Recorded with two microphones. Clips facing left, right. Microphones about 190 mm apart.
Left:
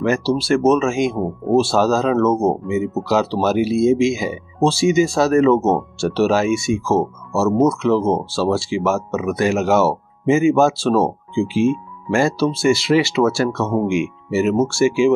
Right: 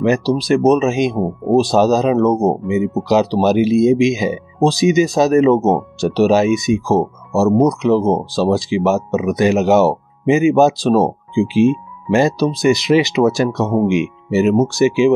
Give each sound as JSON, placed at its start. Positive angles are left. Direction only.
{"t": 0.0, "sound": "speech", "side_deg": -20}